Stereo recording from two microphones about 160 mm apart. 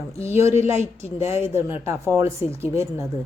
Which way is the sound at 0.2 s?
15° right (ahead or behind).